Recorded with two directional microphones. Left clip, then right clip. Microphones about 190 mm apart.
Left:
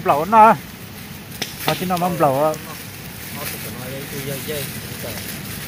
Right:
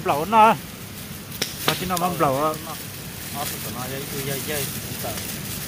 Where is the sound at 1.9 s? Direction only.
5° left (ahead or behind).